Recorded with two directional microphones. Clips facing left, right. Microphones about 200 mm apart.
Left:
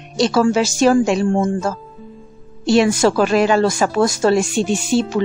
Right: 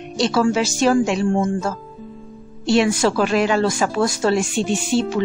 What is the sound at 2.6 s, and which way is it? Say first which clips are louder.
A woman's voice: left 3 dB; 40° left (ahead or behind).